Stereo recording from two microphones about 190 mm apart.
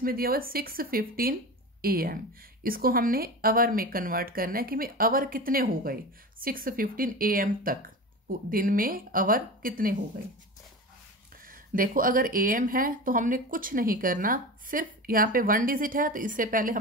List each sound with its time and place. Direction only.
0.0 s speech: 50° right (ahead or behind)
11.4 s speech: 45° right (ahead or behind)